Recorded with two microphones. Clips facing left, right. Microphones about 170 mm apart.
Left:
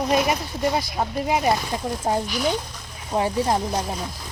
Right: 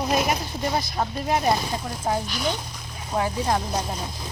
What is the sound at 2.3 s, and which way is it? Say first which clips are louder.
Speech: left 3 dB; 5° left (ahead or behind).